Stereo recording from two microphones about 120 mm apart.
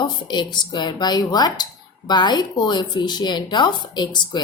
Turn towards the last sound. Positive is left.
turn(degrees=40)  # may be behind; listen again after turning